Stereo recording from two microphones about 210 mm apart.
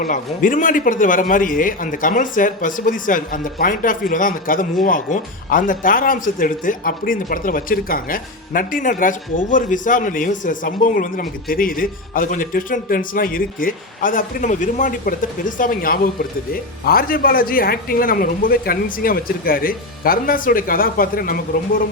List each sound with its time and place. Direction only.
0.0 s a man's voice: 40° left (ahead or behind)